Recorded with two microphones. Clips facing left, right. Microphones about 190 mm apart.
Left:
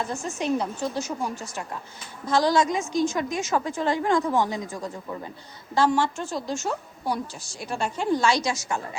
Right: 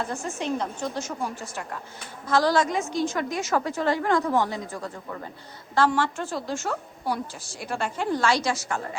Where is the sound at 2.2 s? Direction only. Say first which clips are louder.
Left 1 dB; 15° left (ahead or behind).